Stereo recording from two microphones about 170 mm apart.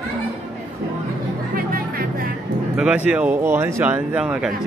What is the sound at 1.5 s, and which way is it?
Music, 60° right (ahead or behind).